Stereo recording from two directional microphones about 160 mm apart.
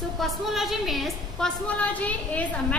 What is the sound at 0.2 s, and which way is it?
A woman's voice, centre (ahead or behind).